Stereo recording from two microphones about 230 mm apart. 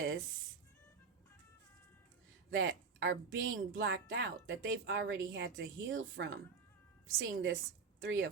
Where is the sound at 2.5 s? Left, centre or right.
Right.